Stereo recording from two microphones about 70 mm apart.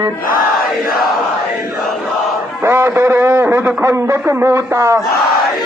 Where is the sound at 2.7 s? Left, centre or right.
Right.